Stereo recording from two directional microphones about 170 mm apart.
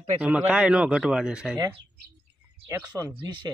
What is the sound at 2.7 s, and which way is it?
Speech, 15° right (ahead or behind).